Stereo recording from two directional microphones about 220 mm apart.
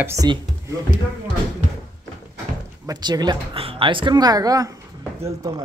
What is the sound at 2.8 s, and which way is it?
Speech, 20° right (ahead or behind).